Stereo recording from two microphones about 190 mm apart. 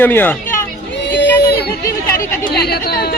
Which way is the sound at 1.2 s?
60° left (ahead or behind).